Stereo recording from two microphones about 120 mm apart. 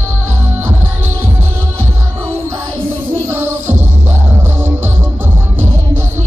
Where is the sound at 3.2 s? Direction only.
20° right (ahead or behind).